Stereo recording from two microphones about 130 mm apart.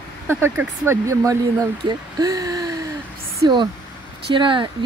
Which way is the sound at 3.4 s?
35° right (ahead or behind).